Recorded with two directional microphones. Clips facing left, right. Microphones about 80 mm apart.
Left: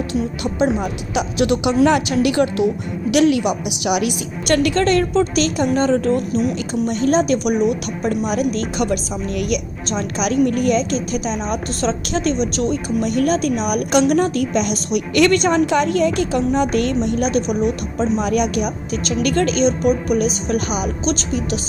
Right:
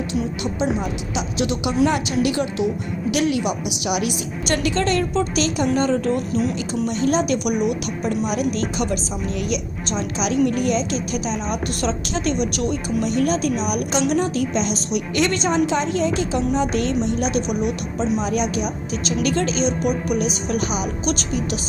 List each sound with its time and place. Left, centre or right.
0.6 s a woman's voice: left
3.4 s a woman's voice: left
8.5 s a woman's voice: left
13.1 s a woman's voice: left
17.3 s a woman's voice: left
18.2 s a woman's voice: left
21.0 s a woman's voice: left